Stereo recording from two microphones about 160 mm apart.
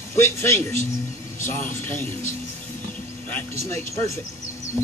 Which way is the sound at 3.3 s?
15° left (ahead or behind).